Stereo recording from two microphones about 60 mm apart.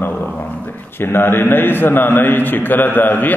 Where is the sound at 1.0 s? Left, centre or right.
Left.